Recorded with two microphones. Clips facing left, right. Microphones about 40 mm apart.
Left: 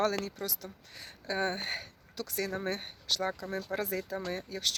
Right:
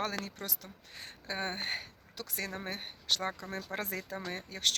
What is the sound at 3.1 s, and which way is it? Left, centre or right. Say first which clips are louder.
Speech: left 1 dB; right.